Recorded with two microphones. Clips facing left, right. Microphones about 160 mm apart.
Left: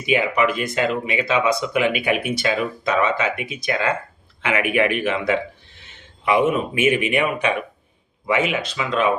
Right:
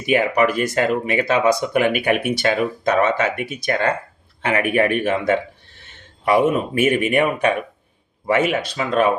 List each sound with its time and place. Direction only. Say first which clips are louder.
0.1 s speech: right 2 dB; 45° right (ahead or behind)
8.5 s speech: right 3 dB; 40° right (ahead or behind)